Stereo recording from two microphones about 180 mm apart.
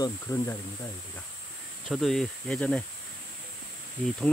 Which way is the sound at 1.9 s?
Centre (ahead or behind).